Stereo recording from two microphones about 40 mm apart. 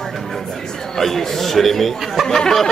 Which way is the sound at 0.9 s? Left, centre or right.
Centre.